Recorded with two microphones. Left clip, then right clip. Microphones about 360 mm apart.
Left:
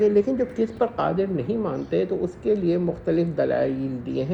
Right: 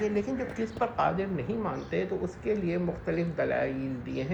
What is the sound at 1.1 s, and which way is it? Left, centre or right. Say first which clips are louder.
Speech: left 8 dB; left.